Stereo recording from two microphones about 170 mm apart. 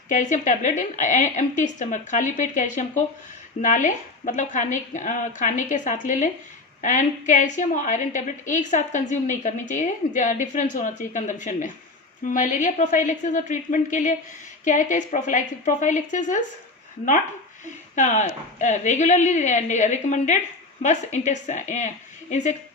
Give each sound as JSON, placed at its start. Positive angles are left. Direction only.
{"t": 0.1, "sound": "a woman's voice", "side_deg": 50}
{"t": 17.9, "sound": "a woman's voice", "side_deg": 45}